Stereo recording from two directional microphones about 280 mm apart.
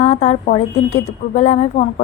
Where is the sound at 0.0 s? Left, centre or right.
Left.